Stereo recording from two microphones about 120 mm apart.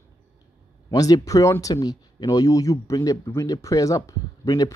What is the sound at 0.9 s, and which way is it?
Speech, 30° left (ahead or behind).